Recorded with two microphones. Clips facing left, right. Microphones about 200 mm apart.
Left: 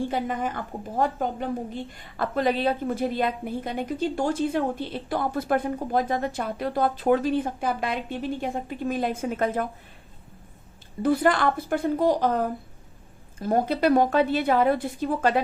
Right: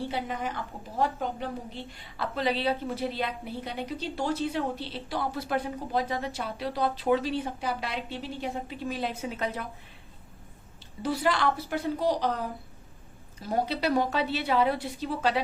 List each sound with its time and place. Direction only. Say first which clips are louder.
0.1 s a woman's voice: left 5 dB; 50° left (ahead or behind)
11.0 s a woman's voice: left 5 dB; 55° left (ahead or behind)